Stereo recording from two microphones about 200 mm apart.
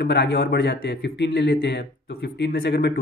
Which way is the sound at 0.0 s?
60° left (ahead or behind).